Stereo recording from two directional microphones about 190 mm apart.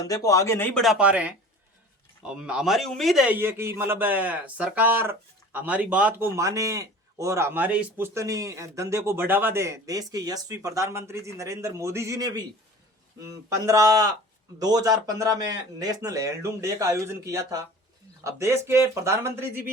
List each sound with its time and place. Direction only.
0.0 s speech: 15° left (ahead or behind)
0.8 s a man's voice: 5° right (ahead or behind); by 12.4 s 20° right (ahead or behind)
13.5 s a man's voice: 15° right (ahead or behind)